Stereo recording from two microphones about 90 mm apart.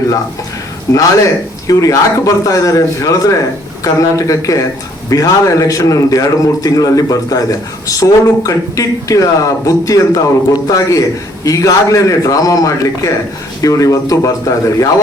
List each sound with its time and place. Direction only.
0.9 s speech: 40° left (ahead or behind)